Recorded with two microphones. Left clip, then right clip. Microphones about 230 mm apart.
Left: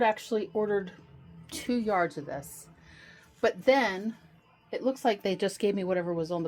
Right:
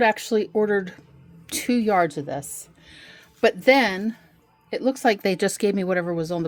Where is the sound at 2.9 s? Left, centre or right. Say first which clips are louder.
Right 7 dB; right.